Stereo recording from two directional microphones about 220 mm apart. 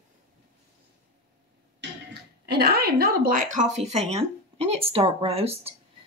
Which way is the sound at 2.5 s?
45° right (ahead or behind).